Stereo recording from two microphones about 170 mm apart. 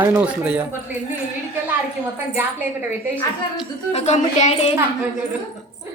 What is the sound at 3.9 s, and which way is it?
Speech, 40° left (ahead or behind).